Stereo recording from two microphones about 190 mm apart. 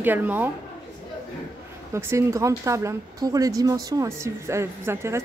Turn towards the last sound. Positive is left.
turn(degrees=-15)  # may be behind; listen again after turning